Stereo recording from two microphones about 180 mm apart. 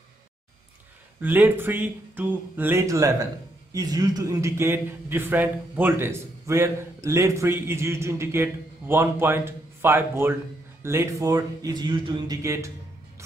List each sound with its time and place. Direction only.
1.2 s a man's voice: 10° right (ahead or behind)